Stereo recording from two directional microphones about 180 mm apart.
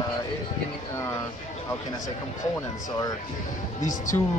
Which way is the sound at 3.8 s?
45° left (ahead or behind).